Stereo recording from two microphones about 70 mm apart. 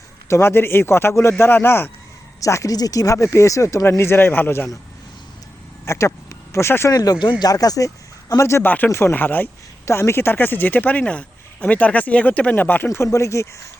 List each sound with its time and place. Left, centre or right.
0.3 s a man's voice: left
2.4 s speech: left
5.8 s speech: left
6.9 s speech: left
7.5 s speech: left
8.4 s speech: left
8.6 s speech: left
8.9 s a man's voice: left
9.1 s speech: left
9.8 s speech: left